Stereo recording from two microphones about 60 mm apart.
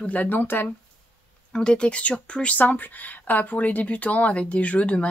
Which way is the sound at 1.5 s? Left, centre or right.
Centre.